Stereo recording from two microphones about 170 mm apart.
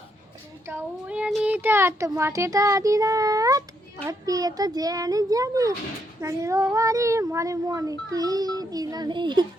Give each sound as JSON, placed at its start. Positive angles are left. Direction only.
{"t": 0.7, "sound": "a child's voice", "side_deg": -10}